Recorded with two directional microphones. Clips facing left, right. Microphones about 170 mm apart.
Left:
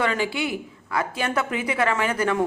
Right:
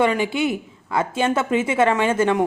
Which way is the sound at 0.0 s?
20° right (ahead or behind).